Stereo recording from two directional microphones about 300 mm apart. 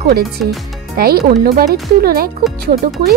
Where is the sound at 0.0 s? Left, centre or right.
Right.